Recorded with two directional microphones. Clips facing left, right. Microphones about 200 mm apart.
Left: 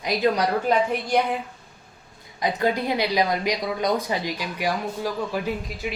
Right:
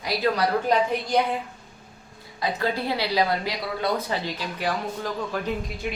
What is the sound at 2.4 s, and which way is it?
Speech, 20° left (ahead or behind).